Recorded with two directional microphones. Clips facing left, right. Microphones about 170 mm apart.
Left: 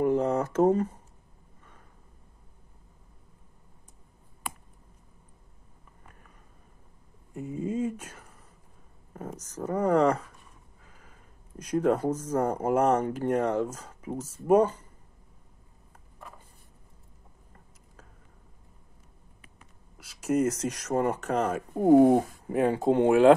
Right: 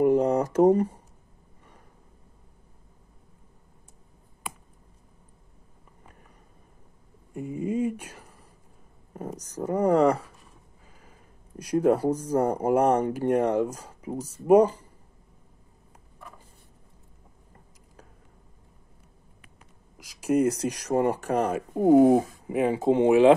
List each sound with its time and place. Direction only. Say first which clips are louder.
0.0 s a sound: right 4 dB; 15° right (ahead or behind)
7.3 s a sound: right 3 dB; 10° right (ahead or behind)
9.1 s speech: right 3 dB; 15° right (ahead or behind)
11.8 s speech: right 3 dB; 10° right (ahead or behind)
20.0 s speech: right 3 dB; 10° right (ahead or behind)
20.8 s speech: right 3 dB; 30° right (ahead or behind)
21.5 s speech: even; 5° right (ahead or behind)